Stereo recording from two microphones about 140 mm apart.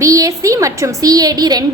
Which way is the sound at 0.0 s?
25° right (ahead or behind).